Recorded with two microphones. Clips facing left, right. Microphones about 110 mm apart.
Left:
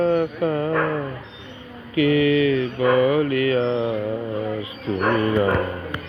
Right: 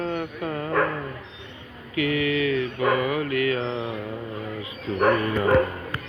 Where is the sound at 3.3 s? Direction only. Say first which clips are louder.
Left 3 dB; 65° right (ahead or behind).